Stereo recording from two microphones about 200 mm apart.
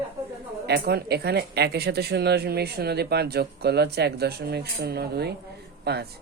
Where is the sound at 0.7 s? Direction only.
55° right (ahead or behind).